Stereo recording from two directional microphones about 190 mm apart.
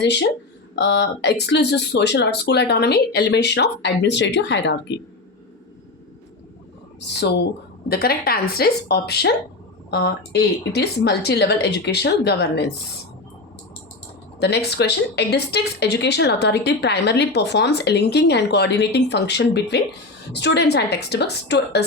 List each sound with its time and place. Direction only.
0.0 s speech: 60° left (ahead or behind)
7.1 s speech: 65° left (ahead or behind)
7.9 s speech: 55° left (ahead or behind)
14.3 s speech: 60° left (ahead or behind)